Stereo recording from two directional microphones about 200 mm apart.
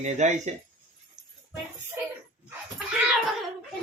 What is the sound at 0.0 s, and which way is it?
Speech, 35° right (ahead or behind).